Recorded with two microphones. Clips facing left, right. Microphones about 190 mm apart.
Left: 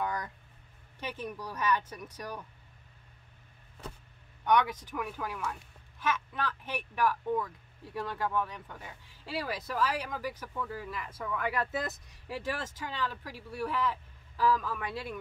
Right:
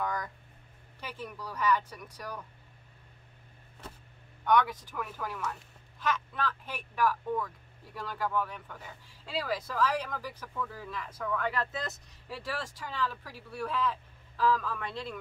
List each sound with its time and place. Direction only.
0.0 s a sound: 25° left (ahead or behind)
1.0 s a woman's voice: 20° left (ahead or behind)
4.5 s a woman's voice: 20° left (ahead or behind)